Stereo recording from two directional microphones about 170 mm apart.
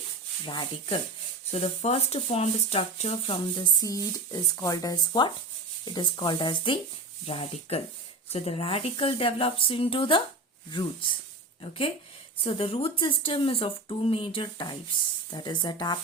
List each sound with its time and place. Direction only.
0.4 s speech: 30° left (ahead or behind)
1.5 s speech: 40° left (ahead or behind)
12.4 s speech: 35° left (ahead or behind)